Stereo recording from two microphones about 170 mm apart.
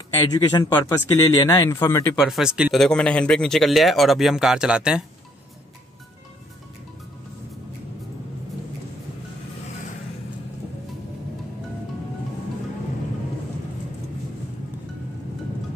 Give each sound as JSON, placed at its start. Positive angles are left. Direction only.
{"t": 0.3, "sound": "a man's voice", "side_deg": 25}
{"t": 2.2, "sound": "speech", "side_deg": 0}